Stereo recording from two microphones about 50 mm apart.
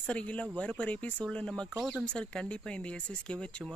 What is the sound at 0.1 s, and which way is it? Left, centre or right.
Speech, left.